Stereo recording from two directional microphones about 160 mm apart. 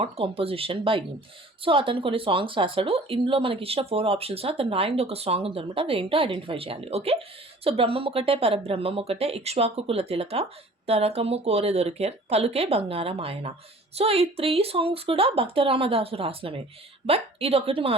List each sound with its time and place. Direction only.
0.0 s a woman's voice: 35° right (ahead or behind)